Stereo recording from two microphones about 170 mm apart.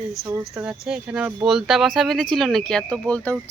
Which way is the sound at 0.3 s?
15° right (ahead or behind).